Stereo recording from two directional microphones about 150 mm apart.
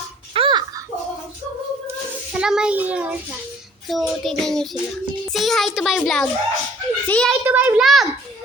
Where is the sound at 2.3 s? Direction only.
5° right (ahead or behind).